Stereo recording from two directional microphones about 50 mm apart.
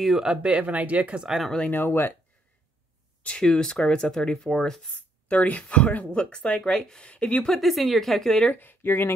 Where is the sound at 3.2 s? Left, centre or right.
Centre.